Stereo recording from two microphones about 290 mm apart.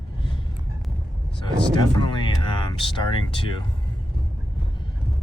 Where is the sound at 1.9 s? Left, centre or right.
Centre.